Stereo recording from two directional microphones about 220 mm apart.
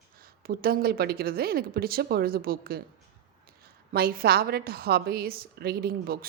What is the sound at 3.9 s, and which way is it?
A woman's voice, 45° right (ahead or behind).